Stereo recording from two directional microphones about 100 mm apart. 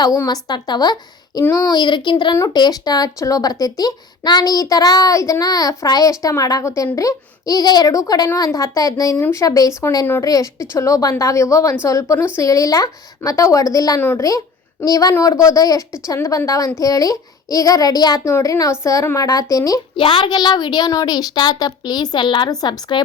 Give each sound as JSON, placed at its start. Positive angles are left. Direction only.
{"t": 0.3, "sound": "a woman's voice", "side_deg": 45}
{"t": 20.0, "sound": "speech", "side_deg": 60}